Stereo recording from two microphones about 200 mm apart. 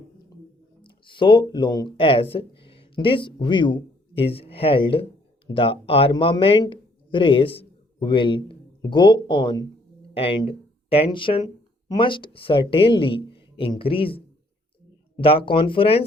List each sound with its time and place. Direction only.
0.8 s speech: 25° left (ahead or behind)